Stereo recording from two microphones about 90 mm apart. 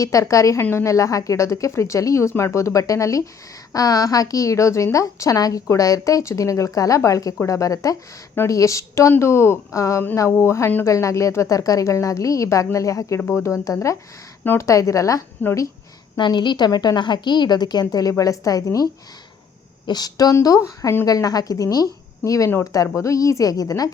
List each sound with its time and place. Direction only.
0.0 s a woman's voice: 35° left (ahead or behind)
13.2 s speech: 25° left (ahead or behind)
13.5 s a woman's voice: 35° left (ahead or behind)
14.4 s speech: 25° left (ahead or behind)
14.7 s a woman's voice: 35° left (ahead or behind)
15.4 s speech: 20° left (ahead or behind)
16.1 s a woman's voice: 55° left (ahead or behind); by 18.9 s 40° left (ahead or behind)
19.9 s a woman's voice: 45° left (ahead or behind)